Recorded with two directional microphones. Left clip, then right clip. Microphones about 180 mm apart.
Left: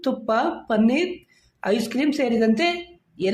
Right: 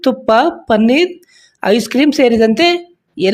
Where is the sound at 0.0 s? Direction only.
45° right (ahead or behind).